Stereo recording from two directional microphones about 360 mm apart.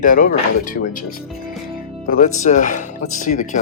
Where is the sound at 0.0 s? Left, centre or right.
Left.